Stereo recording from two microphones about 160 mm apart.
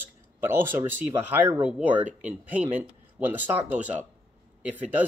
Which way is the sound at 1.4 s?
10° right (ahead or behind).